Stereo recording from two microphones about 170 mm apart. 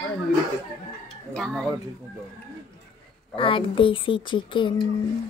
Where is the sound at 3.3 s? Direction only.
30° left (ahead or behind).